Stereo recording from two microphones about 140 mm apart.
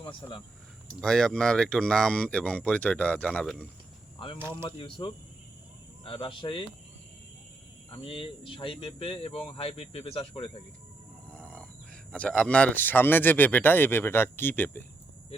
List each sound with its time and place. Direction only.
0.0 s speech: 35° left (ahead or behind)
1.0 s speech: 5° left (ahead or behind)
4.6 s speech: 35° left (ahead or behind)
8.0 s speech: 40° left (ahead or behind)
11.3 s a sound: 10° left (ahead or behind)
12.1 s speech: 10° left (ahead or behind)